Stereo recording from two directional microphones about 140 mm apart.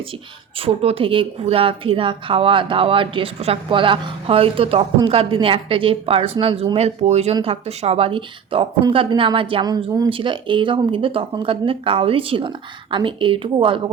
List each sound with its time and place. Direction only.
0.6 s a woman's voice: 45° right (ahead or behind)